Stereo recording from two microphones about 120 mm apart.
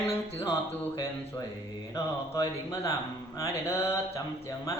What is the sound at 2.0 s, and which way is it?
Mantra, 30° left (ahead or behind).